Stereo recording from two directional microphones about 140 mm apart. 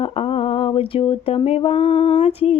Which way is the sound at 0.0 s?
45° left (ahead or behind).